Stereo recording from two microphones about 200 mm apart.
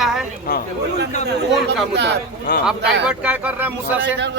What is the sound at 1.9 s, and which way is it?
Speech, 60° right (ahead or behind).